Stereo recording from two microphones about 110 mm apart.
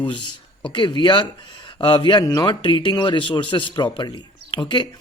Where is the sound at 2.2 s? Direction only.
35° left (ahead or behind).